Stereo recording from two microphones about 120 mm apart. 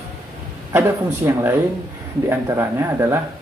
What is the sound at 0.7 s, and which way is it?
A man's voice, 20° right (ahead or behind).